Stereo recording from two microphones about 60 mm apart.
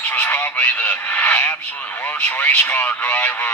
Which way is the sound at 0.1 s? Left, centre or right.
Left.